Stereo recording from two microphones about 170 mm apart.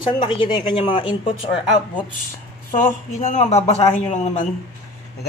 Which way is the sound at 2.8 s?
45° left (ahead or behind).